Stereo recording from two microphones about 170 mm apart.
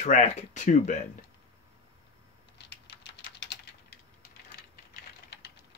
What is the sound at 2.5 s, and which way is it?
Typing, 75° left (ahead or behind).